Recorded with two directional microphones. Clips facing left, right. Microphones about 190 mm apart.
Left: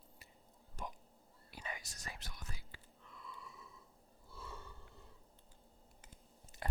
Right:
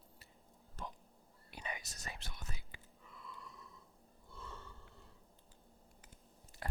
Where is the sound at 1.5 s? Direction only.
20° right (ahead or behind).